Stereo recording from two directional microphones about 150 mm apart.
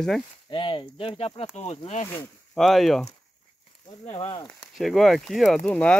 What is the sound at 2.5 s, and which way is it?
Speech, centre (ahead or behind).